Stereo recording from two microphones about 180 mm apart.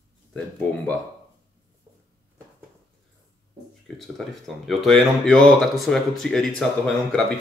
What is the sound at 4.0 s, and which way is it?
Speech, centre (ahead or behind).